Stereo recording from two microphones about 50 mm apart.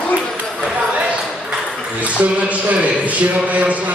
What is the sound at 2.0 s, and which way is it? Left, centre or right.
A man's voice, right.